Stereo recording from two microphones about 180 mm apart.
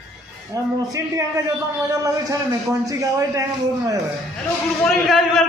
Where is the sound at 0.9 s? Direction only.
15° right (ahead or behind).